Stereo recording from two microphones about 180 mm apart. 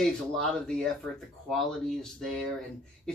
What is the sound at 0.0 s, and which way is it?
Speech, 5° left (ahead or behind).